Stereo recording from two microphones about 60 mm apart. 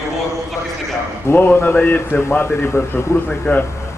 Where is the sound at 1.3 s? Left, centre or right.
Left.